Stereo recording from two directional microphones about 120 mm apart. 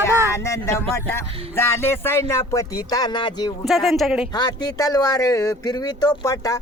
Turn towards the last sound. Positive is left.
turn(degrees=30)  # may be behind; listen again after turning